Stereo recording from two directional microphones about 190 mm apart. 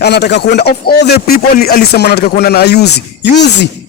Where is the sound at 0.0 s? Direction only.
60° left (ahead or behind).